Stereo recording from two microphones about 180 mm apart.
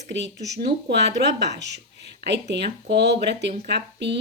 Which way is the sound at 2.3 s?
70° right (ahead or behind).